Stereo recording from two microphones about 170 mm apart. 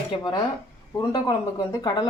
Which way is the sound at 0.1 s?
30° left (ahead or behind).